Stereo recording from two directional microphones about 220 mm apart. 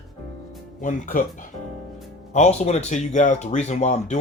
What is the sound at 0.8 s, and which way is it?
Music, 40° left (ahead or behind).